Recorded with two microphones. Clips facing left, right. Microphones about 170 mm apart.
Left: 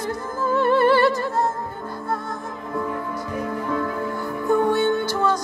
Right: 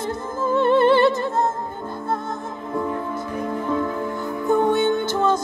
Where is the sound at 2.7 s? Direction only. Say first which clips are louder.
Right 2 dB; 25° right (ahead or behind).